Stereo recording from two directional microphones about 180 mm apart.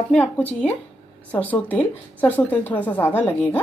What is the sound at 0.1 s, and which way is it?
A woman's voice, 10° left (ahead or behind).